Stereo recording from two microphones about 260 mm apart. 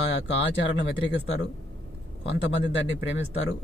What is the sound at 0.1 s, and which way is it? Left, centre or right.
A man's voice, left.